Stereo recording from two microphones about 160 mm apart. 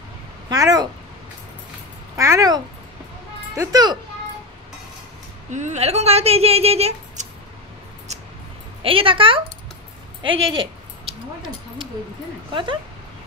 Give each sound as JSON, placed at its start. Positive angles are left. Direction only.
{"t": 0.5, "sound": "a child's voice", "side_deg": -25}
{"t": 2.1, "sound": "a child's voice", "side_deg": -20}
{"t": 5.5, "sound": "speech", "side_deg": -45}
{"t": 8.1, "sound": "mouse", "side_deg": -45}
{"t": 8.8, "sound": "speech", "side_deg": -35}
{"t": 11.1, "sound": "a sound", "side_deg": 0}